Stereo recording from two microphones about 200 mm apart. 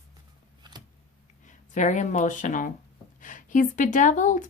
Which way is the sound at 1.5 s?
40° left (ahead or behind).